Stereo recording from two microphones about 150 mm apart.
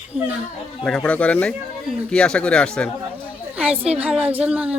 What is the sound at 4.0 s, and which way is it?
Speech, 10° right (ahead or behind).